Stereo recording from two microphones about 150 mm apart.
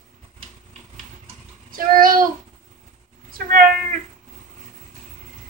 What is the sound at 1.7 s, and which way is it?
Child singing, 65° right (ahead or behind).